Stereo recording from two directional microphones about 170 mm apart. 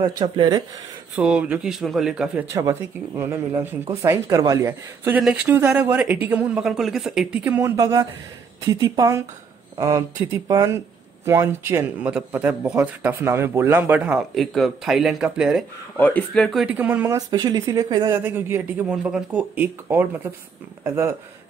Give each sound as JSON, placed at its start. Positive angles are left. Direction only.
{"t": 0.0, "sound": "speech", "side_deg": -25}
{"t": 1.1, "sound": "speech", "side_deg": -5}
{"t": 2.5, "sound": "a man's voice", "side_deg": -15}
{"t": 16.0, "sound": "a man's voice", "side_deg": 10}